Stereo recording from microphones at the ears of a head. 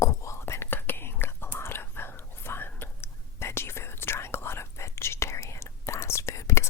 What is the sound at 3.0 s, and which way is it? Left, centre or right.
Whispering, left.